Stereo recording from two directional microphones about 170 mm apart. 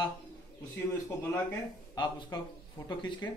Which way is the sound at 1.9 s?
25° left (ahead or behind).